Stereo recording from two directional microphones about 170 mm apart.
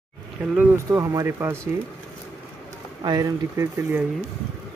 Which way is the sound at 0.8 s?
20° right (ahead or behind).